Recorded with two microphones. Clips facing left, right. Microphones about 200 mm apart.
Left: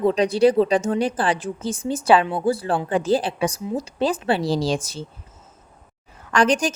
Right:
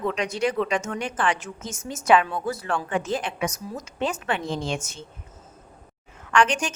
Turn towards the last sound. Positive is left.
turn(degrees=35)  # may be behind; listen again after turning